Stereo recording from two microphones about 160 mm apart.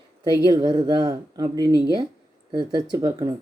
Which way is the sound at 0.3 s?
25° right (ahead or behind).